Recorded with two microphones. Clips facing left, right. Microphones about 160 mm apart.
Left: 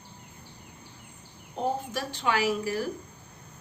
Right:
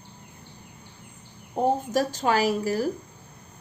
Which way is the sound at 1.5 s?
40° right (ahead or behind).